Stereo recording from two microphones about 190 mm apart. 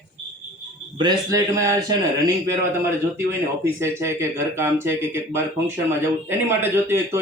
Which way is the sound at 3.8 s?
15° right (ahead or behind).